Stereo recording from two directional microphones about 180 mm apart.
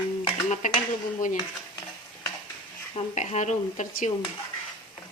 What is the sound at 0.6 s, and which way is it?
Speech, 45° left (ahead or behind).